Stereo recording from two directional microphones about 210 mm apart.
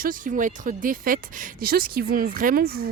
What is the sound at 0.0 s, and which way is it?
Speech, 40° right (ahead or behind).